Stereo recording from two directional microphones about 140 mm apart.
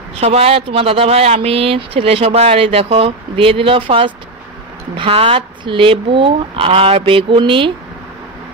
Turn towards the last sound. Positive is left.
turn(degrees=-35)  # may be behind; listen again after turning